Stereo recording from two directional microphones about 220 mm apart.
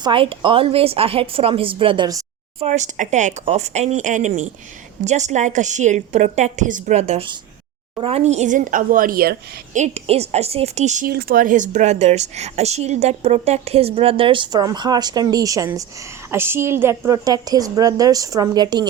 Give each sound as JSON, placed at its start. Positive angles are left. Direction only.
{"t": 0.0, "sound": "a woman's voice", "side_deg": -25}
{"t": 2.6, "sound": "a woman's voice", "side_deg": -30}